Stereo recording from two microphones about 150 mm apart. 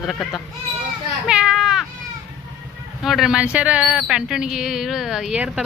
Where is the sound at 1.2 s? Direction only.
5° right (ahead or behind).